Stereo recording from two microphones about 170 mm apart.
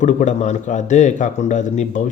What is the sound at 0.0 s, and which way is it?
Speech, 45° left (ahead or behind).